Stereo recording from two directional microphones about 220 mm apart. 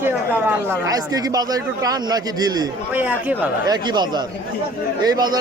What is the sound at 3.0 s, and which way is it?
Speech, 5° right (ahead or behind).